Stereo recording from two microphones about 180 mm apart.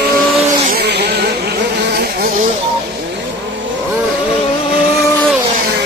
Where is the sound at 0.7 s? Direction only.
65° right (ahead or behind).